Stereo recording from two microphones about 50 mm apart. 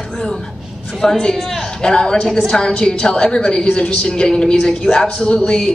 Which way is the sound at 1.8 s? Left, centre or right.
Centre.